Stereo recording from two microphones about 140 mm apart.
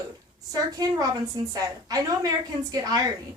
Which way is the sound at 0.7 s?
25° right (ahead or behind).